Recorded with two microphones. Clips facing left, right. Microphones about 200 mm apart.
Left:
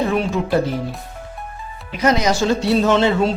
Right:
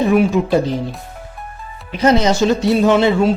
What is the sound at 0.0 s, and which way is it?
Speech, 15° right (ahead or behind).